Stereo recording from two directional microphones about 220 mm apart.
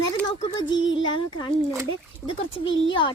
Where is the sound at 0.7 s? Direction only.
60° left (ahead or behind).